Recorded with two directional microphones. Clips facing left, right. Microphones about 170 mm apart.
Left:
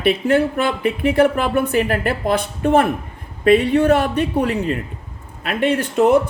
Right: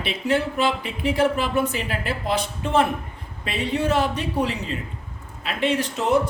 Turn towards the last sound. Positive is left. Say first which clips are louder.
# left 7 dB
turn(degrees=55)  # may be behind; listen again after turning